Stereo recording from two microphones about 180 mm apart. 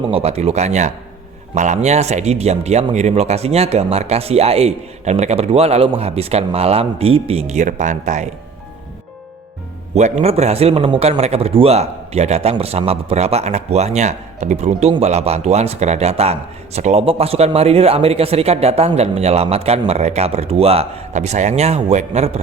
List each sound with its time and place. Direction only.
0.1 s a man's voice: 35° right (ahead or behind)
9.9 s a man's voice: 40° right (ahead or behind)